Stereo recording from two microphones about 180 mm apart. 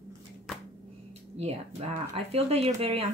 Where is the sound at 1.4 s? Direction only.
35° right (ahead or behind).